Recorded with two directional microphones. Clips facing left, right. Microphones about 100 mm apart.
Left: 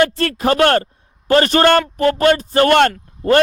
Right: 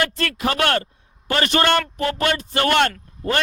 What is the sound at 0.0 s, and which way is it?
A man's voice, 35° left (ahead or behind).